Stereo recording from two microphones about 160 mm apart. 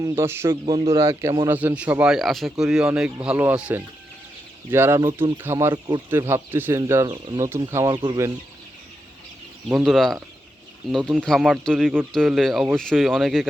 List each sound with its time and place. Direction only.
0.0 s speech: 15° right (ahead or behind)
0.5 s speech: 30° right (ahead or behind)
0.9 s a man's voice: 20° right (ahead or behind)
9.8 s speech: centre (ahead or behind)